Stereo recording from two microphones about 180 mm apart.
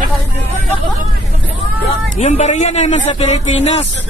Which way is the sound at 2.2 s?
40° left (ahead or behind).